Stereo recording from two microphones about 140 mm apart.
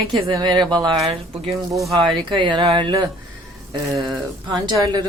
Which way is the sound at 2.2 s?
35° right (ahead or behind).